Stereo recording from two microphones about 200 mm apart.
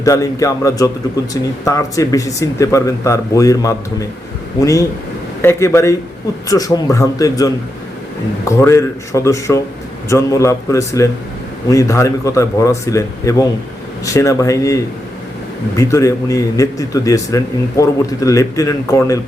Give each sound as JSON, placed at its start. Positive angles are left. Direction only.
{"t": 0.0, "sound": "speech", "side_deg": 15}
{"t": 15.8, "sound": "speech", "side_deg": 15}